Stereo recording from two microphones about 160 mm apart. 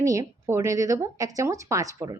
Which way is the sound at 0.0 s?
20° right (ahead or behind).